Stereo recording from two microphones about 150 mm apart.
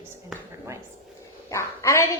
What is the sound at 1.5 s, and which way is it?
Speech, 20° left (ahead or behind).